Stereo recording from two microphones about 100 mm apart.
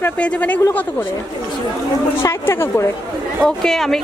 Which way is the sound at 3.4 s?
5° left (ahead or behind).